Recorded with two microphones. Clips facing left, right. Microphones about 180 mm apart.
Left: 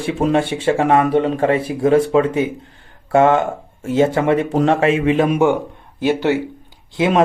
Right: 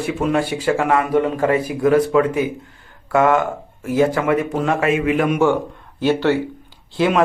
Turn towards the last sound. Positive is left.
turn(degrees=20)  # may be behind; listen again after turning